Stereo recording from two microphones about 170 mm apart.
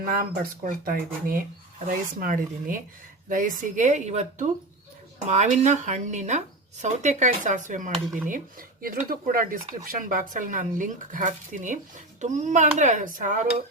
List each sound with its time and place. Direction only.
0.0 s speech: 55° right (ahead or behind)